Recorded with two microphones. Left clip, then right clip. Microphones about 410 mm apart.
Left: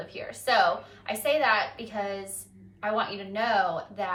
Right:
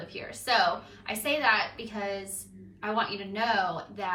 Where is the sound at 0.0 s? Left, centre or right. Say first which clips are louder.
Left 4 dB; centre.